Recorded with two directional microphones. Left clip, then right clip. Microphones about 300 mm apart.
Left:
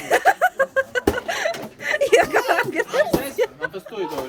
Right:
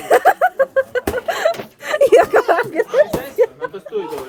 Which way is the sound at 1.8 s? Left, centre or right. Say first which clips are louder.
Right 5 dB; right.